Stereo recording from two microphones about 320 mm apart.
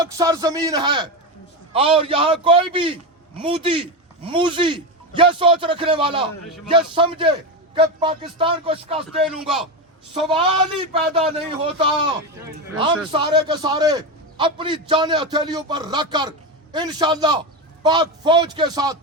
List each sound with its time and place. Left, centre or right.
0.0 s a man's voice: centre
9.0 s speech: centre
10.2 s a man's voice: centre
12.5 s a sound: centre
13.1 s a man's voice: centre